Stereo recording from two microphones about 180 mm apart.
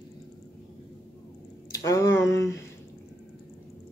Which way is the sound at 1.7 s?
20° left (ahead or behind).